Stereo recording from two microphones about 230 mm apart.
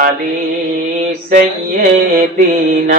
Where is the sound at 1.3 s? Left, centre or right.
Right.